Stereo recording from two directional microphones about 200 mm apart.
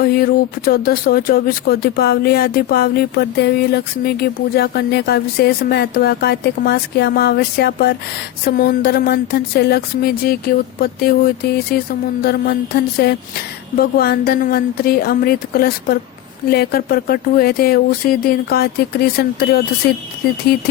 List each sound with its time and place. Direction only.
0.0 s speech: 50° left (ahead or behind)